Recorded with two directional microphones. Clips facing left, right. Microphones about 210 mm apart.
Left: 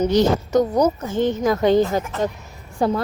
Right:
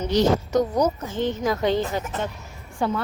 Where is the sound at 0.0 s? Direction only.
45° left (ahead or behind).